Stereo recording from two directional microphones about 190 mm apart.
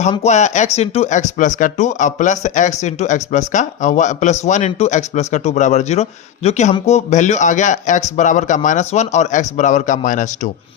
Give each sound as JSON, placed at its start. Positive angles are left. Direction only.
{"t": 0.1, "sound": "speech", "side_deg": 35}